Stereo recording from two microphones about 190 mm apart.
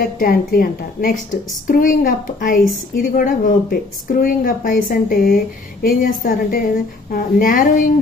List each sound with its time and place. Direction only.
0.0 s speech: 50° left (ahead or behind)